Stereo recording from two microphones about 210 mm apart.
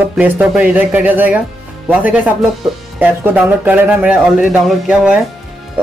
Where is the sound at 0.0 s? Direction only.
5° right (ahead or behind).